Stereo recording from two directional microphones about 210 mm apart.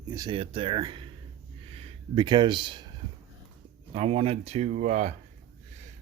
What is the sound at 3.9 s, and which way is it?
Speech, 30° right (ahead or behind).